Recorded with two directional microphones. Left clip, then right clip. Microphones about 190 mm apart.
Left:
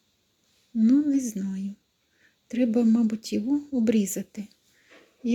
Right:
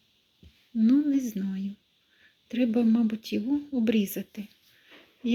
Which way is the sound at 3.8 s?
20° left (ahead or behind).